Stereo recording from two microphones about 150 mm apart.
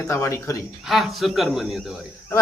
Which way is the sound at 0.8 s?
Centre (ahead or behind).